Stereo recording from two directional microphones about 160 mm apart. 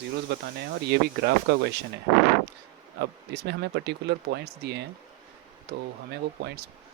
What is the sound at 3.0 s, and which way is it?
Speech, 90° right.